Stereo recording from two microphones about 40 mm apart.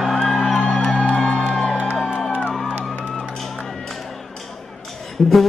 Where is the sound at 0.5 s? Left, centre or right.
Centre.